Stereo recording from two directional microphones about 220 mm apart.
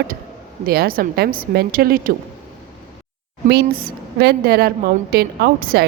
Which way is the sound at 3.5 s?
40° right (ahead or behind).